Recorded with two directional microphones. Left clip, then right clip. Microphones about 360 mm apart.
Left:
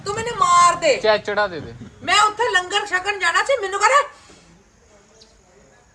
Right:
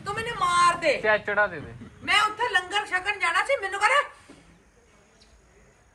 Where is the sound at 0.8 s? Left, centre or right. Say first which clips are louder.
Left 6 dB; left.